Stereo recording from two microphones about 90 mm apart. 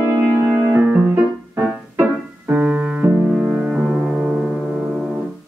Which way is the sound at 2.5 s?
20° right (ahead or behind).